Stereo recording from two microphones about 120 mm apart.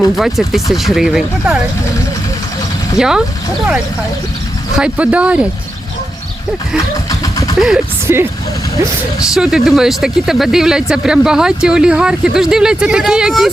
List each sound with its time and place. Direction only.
0.2 s speech: centre (ahead or behind)
3.0 s speech: 5° right (ahead or behind)
4.8 s speech: 10° right (ahead or behind)
7.1 s vehicle: 30° left (ahead or behind)
8.0 s speech: 20° right (ahead or behind)
9.2 s speech: 5° right (ahead or behind)